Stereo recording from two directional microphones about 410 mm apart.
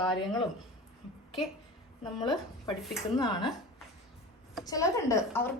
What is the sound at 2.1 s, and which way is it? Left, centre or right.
A woman's voice, centre.